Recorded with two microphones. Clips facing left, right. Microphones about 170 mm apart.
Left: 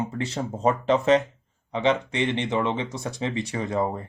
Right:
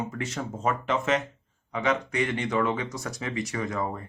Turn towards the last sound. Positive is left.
turn(degrees=30)  # may be behind; listen again after turning